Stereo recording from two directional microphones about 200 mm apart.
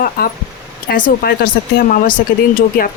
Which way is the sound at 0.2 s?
50° left (ahead or behind).